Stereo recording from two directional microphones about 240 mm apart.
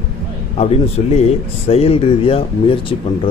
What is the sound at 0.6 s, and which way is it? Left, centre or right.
Speech, left.